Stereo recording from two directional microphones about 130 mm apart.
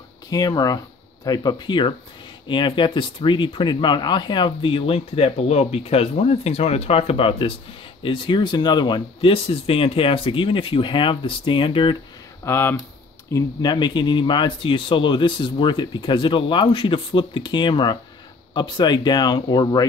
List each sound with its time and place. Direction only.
0.3 s speech: 30° left (ahead or behind)
12.4 s speech: 20° left (ahead or behind)
13.3 s speech: 30° left (ahead or behind)